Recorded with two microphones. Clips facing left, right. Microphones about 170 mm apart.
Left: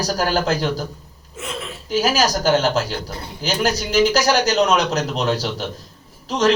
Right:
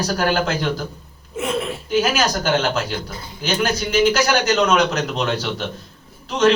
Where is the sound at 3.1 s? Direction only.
65° left (ahead or behind).